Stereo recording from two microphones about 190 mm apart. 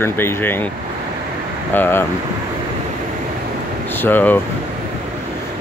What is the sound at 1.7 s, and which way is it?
Speech, 10° left (ahead or behind).